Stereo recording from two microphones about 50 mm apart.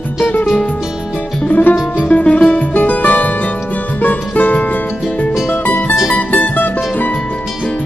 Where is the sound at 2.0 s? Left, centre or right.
Left.